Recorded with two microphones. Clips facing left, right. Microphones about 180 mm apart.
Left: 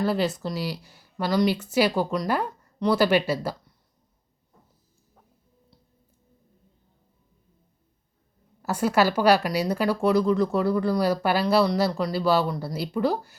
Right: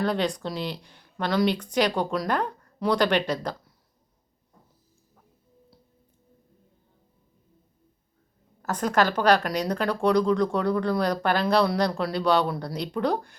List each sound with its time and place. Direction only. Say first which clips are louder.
0.0 s a woman's voice: left 1 dB; 5° left (ahead or behind)
8.6 s a woman's voice: left 2 dB; 10° left (ahead or behind)